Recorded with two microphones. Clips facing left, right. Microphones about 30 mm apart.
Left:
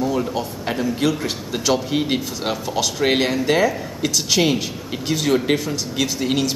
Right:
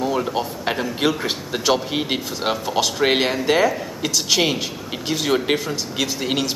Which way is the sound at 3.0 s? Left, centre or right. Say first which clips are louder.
Left 2 dB; centre.